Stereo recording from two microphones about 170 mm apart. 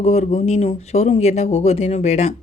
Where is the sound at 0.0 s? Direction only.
40° left (ahead or behind).